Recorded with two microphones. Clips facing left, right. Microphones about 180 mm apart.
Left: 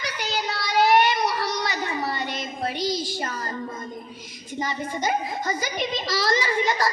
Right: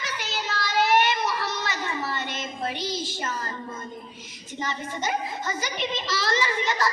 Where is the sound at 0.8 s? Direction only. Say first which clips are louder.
Left 3 dB; 40° left (ahead or behind).